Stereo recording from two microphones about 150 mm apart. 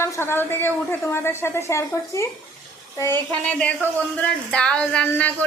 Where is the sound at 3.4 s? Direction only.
10° left (ahead or behind).